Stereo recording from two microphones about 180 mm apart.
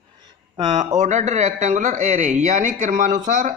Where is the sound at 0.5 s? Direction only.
25° right (ahead or behind).